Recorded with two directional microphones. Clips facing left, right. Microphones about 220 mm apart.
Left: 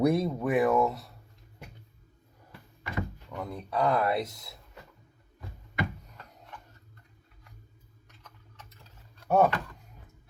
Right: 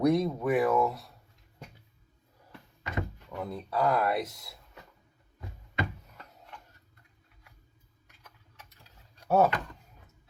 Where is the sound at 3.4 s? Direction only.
Centre (ahead or behind).